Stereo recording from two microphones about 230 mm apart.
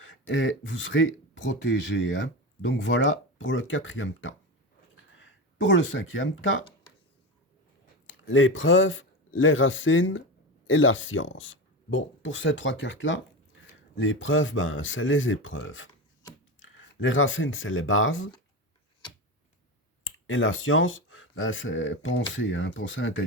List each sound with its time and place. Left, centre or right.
0.0 s speech: left
8.0 s speech: left
20.1 s speech: left